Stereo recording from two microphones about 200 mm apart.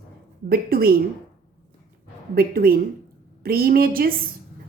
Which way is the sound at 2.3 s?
45° right (ahead or behind).